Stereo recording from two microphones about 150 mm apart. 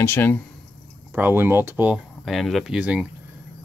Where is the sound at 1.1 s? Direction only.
15° right (ahead or behind).